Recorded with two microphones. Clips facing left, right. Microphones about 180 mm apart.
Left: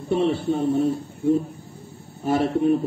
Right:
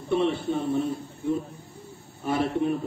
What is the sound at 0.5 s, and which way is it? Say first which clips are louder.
A man's voice: left 5 dB; 40° left (ahead or behind).